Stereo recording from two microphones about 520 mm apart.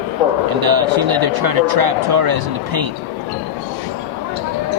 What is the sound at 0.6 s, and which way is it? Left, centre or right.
Speech, right.